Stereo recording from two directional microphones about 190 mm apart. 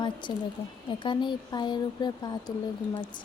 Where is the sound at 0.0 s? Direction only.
25° left (ahead or behind).